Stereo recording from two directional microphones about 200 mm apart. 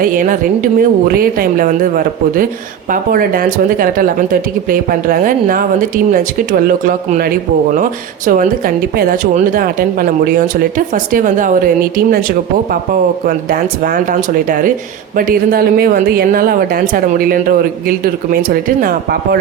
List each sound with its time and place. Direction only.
0.0 s a woman's voice: 40° right (ahead or behind)
12.9 s a woman's voice: 45° right (ahead or behind)